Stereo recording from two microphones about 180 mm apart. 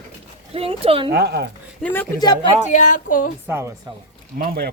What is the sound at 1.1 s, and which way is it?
Speech, 65° right (ahead or behind).